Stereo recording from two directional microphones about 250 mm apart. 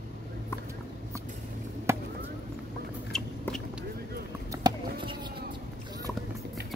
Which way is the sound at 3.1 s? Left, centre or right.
Centre.